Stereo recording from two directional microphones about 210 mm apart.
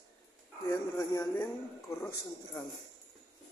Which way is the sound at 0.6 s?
15° left (ahead or behind).